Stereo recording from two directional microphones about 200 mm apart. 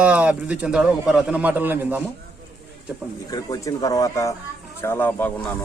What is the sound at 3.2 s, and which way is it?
Speech, 20° left (ahead or behind).